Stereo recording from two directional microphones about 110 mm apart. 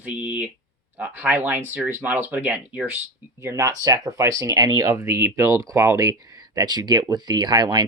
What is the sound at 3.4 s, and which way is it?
Speech, 30° right (ahead or behind).